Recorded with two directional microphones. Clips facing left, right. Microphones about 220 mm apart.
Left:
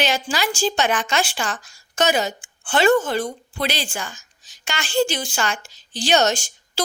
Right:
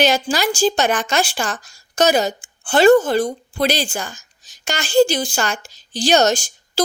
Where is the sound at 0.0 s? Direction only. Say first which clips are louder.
Right 5 dB; 40° right (ahead or behind).